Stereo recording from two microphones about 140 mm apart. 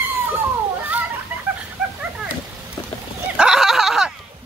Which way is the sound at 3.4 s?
5° right (ahead or behind).